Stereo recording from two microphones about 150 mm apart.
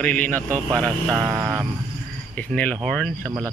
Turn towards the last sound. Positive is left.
turn(degrees=5)  # may be behind; listen again after turning